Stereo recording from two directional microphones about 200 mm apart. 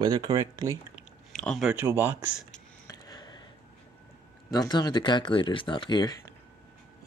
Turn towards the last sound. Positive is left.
turn(degrees=20)  # may be behind; listen again after turning